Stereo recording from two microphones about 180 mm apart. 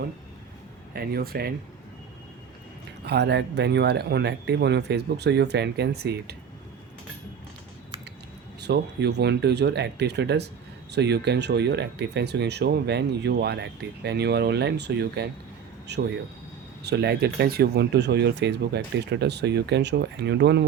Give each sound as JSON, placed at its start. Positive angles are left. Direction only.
{"t": 0.9, "sound": "speech", "side_deg": -55}
{"t": 3.1, "sound": "speech", "side_deg": -70}
{"t": 8.6, "sound": "speech", "side_deg": -70}